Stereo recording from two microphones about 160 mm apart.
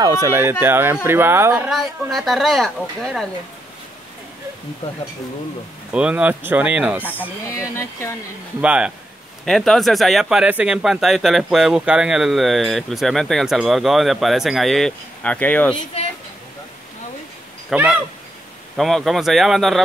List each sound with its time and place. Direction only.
0.0 s speech: 25° right (ahead or behind)
1.7 s speech: centre (ahead or behind)
5.9 s speech: 10° right (ahead or behind)
7.0 s speech: 10° left (ahead or behind)
8.5 s speech: 5° right (ahead or behind); by 15.7 s 10° left (ahead or behind)
15.7 s speech: 40° left (ahead or behind)
17.6 s speech: 5° right (ahead or behind)